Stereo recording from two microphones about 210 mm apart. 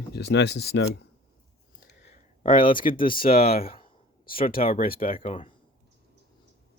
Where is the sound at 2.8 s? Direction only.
40° left (ahead or behind).